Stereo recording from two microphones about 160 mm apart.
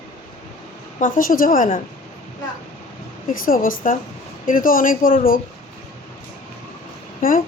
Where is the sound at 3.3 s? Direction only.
60° left (ahead or behind).